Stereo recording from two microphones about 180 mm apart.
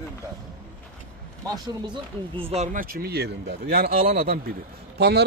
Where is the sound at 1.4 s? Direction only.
25° right (ahead or behind).